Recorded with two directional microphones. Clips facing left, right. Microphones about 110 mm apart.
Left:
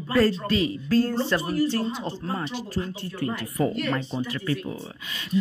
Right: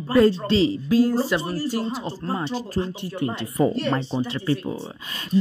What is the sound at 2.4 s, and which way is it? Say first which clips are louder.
Speech: right 4 dB; 35° right (ahead or behind).